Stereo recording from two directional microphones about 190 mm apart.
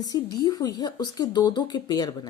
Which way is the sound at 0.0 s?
20° left (ahead or behind).